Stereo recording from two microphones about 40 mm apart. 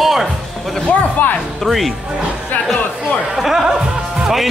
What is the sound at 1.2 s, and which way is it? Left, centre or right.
Speech, left.